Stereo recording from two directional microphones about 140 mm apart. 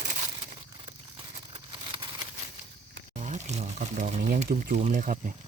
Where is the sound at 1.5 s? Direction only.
40° right (ahead or behind).